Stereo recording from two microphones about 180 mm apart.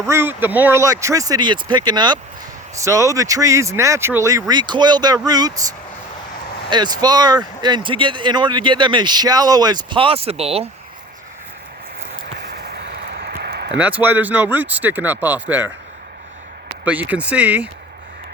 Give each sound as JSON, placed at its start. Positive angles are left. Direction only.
{"t": 0.0, "sound": "speech", "side_deg": -15}
{"t": 6.7, "sound": "speech", "side_deg": -25}
{"t": 13.1, "sound": "a sound", "side_deg": -60}
{"t": 13.7, "sound": "speech", "side_deg": -10}
{"t": 16.8, "sound": "speech", "side_deg": -10}